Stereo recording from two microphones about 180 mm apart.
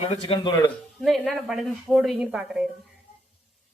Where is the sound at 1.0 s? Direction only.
Centre (ahead or behind).